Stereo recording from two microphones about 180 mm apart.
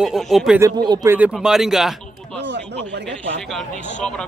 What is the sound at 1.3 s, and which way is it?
Speech, centre (ahead or behind).